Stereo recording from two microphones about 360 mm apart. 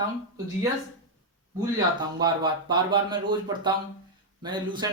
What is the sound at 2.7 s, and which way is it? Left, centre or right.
Speech, centre.